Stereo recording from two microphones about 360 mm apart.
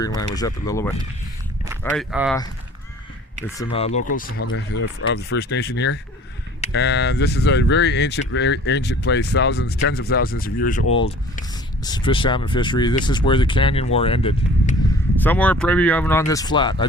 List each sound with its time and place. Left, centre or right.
0.2 s speech: centre
3.4 s speech: centre
15.2 s speech: centre